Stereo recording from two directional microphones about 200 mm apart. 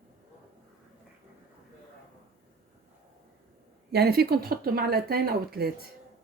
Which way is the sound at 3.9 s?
50° right (ahead or behind).